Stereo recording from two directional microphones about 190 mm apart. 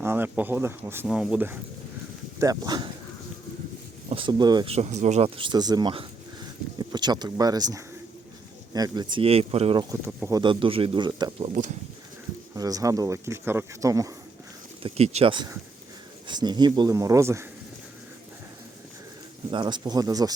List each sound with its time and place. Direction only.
0.0 s speech: 10° right (ahead or behind)
2.4 s speech: 20° right (ahead or behind)
4.1 s speech: 25° right (ahead or behind)
4.7 s speech: 35° right (ahead or behind)
12.5 s speech: 20° right (ahead or behind)
14.8 s speech: 35° right (ahead or behind); by 17.4 s 15° right (ahead or behind)
19.5 s speech: 25° right (ahead or behind)